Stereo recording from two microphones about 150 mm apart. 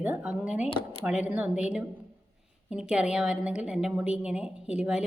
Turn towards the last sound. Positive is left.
turn(degrees=-5)  # may be behind; listen again after turning